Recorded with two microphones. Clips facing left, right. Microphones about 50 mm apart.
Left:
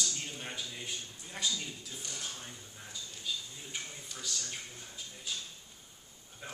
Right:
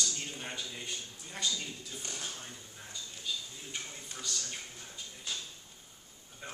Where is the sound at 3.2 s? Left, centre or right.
Centre.